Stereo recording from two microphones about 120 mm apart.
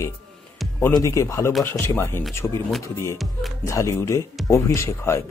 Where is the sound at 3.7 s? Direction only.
25° left (ahead or behind).